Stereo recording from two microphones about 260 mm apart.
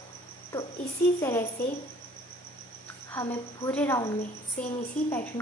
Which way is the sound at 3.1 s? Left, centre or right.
Centre.